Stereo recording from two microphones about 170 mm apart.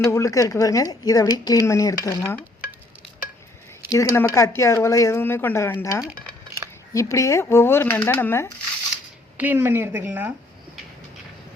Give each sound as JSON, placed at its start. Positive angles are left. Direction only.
{"t": 0.0, "sound": "a woman's voice", "side_deg": 20}
{"t": 3.9, "sound": "speech", "side_deg": 15}
{"t": 9.4, "sound": "a woman's voice", "side_deg": -10}